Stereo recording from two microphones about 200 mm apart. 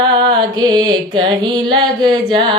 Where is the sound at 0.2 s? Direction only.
20° right (ahead or behind).